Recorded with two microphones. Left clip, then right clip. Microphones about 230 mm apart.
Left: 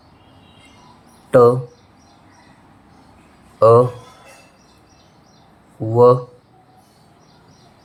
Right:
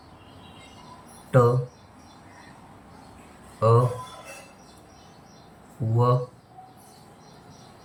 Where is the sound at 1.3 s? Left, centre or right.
Left.